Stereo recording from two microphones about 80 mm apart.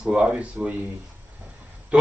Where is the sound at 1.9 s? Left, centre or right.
Centre.